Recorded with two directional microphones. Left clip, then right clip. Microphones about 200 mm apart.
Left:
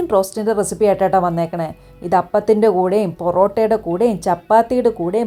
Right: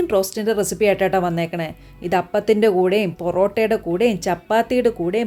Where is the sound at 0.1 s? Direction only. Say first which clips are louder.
Left 3 dB; 5° right (ahead or behind).